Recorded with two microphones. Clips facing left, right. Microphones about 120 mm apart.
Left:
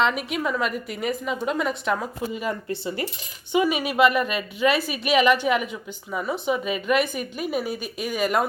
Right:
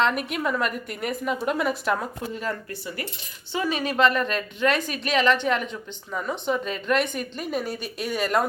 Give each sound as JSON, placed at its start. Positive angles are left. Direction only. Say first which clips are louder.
{"t": 0.0, "sound": "a woman's voice", "louder": "even", "side_deg": 0}
{"t": 2.6, "sound": "cutlery", "louder": "left 6 dB", "side_deg": 25}
{"t": 3.5, "sound": "a woman's voice", "louder": "left 4 dB", "side_deg": 15}